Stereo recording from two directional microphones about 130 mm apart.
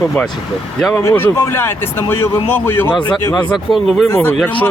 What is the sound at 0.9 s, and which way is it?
Speech, 15° left (ahead or behind).